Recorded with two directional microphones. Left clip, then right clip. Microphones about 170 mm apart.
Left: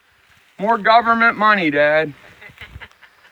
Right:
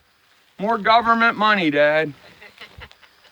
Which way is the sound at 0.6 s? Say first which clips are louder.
Left 3 dB; 20° left (ahead or behind).